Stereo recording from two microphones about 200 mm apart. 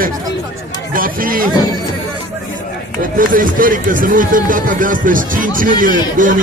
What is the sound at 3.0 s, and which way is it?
Speech, 45° right (ahead or behind).